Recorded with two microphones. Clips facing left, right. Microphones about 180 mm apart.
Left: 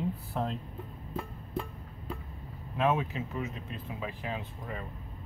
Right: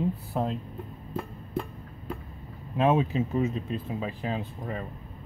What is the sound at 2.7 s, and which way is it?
Speech, 25° right (ahead or behind).